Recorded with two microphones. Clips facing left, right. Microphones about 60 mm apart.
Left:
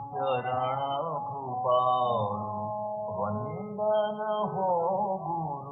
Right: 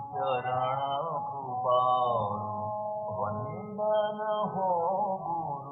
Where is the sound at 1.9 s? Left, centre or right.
Right.